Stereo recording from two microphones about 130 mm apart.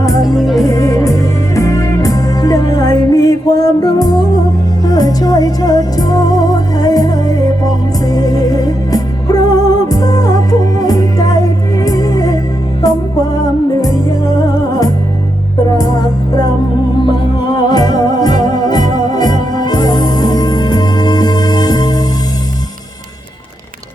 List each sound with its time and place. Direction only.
0.3 s music: centre (ahead or behind)
0.6 s music: 25° left (ahead or behind)
15.8 s music: 30° left (ahead or behind)
17.7 s music: 30° left (ahead or behind)